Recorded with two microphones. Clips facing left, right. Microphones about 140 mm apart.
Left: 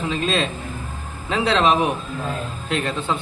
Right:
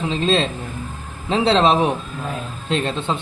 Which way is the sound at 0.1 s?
25° right (ahead or behind).